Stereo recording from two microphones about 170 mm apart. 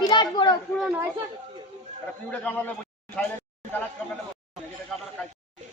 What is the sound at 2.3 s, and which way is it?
Speech, 10° left (ahead or behind).